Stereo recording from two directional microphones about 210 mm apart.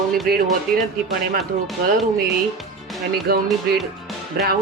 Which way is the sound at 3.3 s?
45° right (ahead or behind).